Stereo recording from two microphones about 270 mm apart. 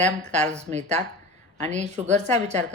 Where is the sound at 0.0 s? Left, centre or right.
Right.